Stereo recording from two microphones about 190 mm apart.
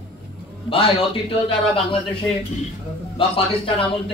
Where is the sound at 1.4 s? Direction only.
30° left (ahead or behind).